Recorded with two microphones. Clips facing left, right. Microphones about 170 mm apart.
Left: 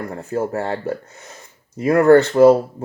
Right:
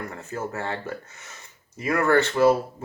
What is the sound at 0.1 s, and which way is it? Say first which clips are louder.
Speech: left 9 dB; 35° left (ahead or behind).